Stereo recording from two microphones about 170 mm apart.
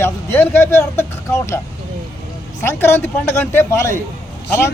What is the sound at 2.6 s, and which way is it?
Speech, 15° left (ahead or behind).